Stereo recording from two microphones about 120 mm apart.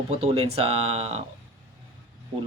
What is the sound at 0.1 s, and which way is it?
Speech, 60° right (ahead or behind).